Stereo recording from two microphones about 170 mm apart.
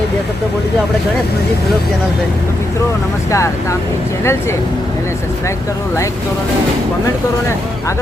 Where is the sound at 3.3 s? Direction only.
15° left (ahead or behind).